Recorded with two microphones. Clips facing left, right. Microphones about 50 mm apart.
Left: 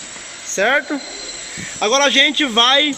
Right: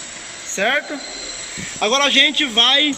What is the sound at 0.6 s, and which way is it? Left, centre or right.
A man's voice, centre.